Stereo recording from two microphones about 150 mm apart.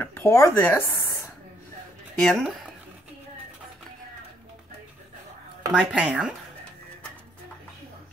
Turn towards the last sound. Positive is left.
turn(degrees=-5)  # may be behind; listen again after turning